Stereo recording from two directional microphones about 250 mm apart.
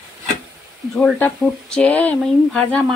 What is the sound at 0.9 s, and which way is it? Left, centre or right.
Speech, centre.